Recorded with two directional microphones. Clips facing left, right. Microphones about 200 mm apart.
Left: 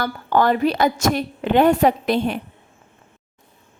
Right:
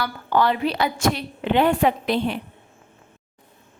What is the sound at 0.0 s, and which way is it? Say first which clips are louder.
A woman's voice: left 2 dB; 45° left (ahead or behind).